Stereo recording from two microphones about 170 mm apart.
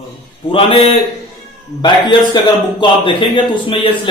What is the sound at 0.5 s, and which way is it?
A man's voice, 30° left (ahead or behind).